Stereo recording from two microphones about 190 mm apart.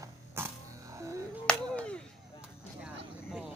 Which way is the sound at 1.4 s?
5° left (ahead or behind).